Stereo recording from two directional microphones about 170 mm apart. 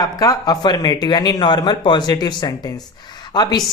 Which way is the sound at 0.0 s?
20° left (ahead or behind).